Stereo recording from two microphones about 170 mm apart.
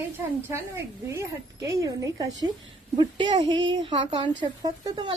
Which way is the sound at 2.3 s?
90° right.